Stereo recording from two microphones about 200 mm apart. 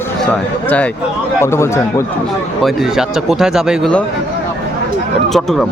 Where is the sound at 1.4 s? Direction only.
15° left (ahead or behind).